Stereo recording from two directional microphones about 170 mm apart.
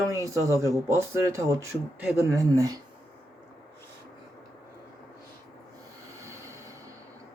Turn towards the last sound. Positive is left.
turn(degrees=-15)  # may be behind; listen again after turning